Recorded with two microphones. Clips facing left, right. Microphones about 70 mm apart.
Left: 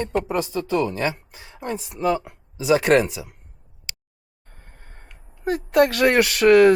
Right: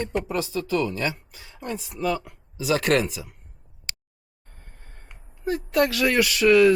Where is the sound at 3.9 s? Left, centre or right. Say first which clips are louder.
Right 1 dB; right.